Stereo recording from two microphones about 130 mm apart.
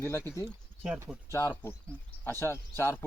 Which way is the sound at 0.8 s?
20° right (ahead or behind).